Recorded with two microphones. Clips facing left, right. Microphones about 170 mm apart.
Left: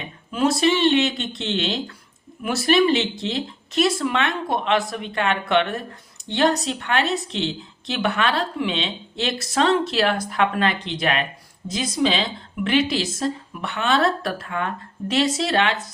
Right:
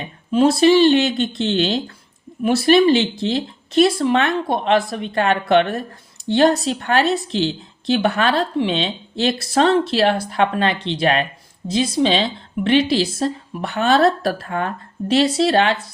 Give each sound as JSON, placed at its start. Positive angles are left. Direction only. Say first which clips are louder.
{"t": 0.3, "sound": "a woman's voice", "louder": "right 6 dB", "side_deg": -35}